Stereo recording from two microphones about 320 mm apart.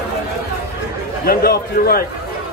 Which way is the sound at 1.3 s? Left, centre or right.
Left.